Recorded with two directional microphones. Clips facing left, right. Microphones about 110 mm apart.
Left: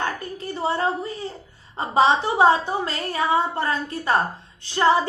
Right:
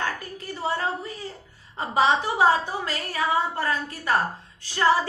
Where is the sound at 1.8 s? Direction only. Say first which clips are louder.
Left 3 dB; 30° left (ahead or behind).